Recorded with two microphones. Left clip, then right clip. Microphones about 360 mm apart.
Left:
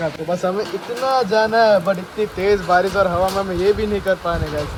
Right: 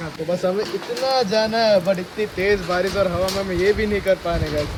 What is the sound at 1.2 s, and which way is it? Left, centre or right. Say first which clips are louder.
Speech: left 5 dB; centre.